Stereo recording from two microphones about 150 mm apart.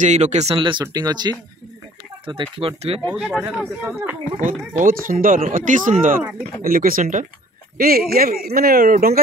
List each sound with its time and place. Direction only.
0.0 s speech: 50° right (ahead or behind)
0.6 s speech: 30° right (ahead or behind)
3.2 s speech: 5° right (ahead or behind)
3.4 s speech: 15° right (ahead or behind)
4.4 s speech: 60° right (ahead or behind)
7.7 s speech: 80° right